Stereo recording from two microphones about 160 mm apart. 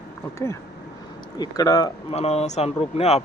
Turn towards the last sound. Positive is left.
turn(degrees=40)  # may be behind; listen again after turning